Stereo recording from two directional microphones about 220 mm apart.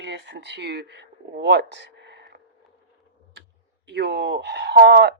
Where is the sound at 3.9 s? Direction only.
50° right (ahead or behind).